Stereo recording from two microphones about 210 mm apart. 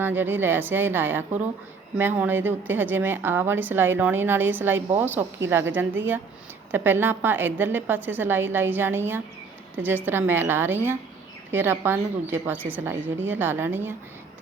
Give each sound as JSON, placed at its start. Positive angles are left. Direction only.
{"t": 0.0, "sound": "a woman's voice", "side_deg": -10}
{"t": 6.7, "sound": "a woman's voice", "side_deg": -10}